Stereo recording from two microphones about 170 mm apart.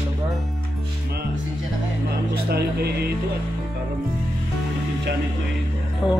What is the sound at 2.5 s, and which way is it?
Music, 70° right (ahead or behind).